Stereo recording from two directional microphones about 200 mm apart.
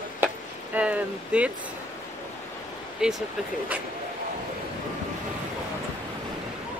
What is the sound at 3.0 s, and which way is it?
Speech, 5° right (ahead or behind).